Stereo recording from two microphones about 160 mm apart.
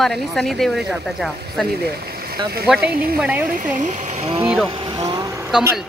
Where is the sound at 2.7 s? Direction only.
10° right (ahead or behind).